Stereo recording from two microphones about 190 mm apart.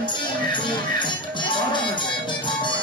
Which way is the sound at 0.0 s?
25° left (ahead or behind).